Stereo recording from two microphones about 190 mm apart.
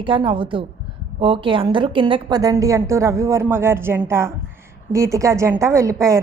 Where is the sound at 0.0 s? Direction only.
25° right (ahead or behind).